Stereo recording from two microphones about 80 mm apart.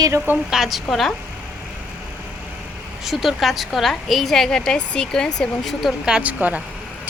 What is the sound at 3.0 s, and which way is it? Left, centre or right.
A woman's voice, centre.